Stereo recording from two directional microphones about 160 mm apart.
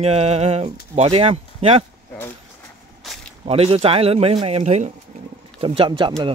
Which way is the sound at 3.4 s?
35° right (ahead or behind).